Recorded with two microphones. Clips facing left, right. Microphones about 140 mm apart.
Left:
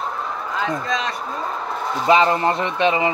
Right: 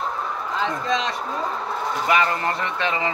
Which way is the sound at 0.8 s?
25° right (ahead or behind).